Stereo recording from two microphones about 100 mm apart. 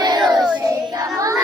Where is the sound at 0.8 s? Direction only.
40° right (ahead or behind).